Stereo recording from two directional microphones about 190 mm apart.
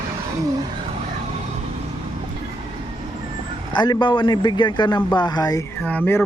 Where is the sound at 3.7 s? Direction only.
25° left (ahead or behind).